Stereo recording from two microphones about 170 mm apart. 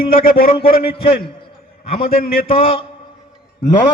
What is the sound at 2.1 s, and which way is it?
Speech, 60° left (ahead or behind).